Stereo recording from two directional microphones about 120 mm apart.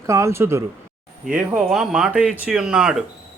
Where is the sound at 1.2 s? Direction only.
10° right (ahead or behind).